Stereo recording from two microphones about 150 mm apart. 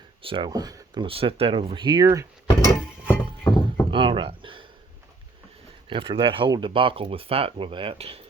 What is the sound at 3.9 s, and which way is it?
Speech, 35° right (ahead or behind).